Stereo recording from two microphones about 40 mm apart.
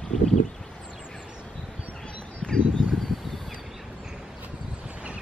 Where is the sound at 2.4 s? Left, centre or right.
Left.